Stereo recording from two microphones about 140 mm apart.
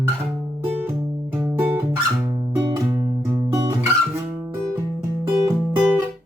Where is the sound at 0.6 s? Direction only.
10° right (ahead or behind).